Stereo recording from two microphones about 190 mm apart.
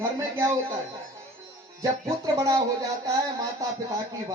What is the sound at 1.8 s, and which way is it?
Speech, 15° right (ahead or behind).